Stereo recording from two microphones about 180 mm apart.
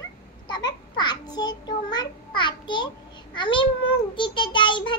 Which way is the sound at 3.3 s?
25° left (ahead or behind).